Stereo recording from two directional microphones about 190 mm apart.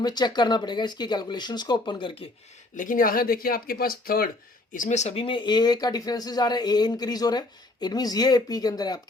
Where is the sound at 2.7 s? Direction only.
45° left (ahead or behind); by 9.0 s 20° left (ahead or behind).